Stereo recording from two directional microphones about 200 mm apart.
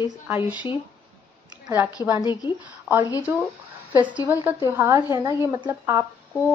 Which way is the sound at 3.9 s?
5° right (ahead or behind).